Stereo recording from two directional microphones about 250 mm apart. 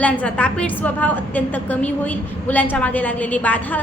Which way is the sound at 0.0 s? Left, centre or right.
Centre.